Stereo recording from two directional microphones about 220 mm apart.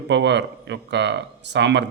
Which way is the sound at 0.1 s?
50° right (ahead or behind).